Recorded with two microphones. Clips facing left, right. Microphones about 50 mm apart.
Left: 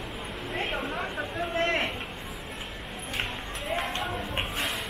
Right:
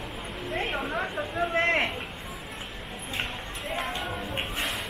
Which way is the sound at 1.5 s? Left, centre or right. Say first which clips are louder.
Right 2 dB; right.